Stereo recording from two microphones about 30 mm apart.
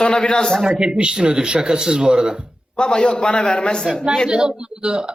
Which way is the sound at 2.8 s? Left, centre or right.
Left.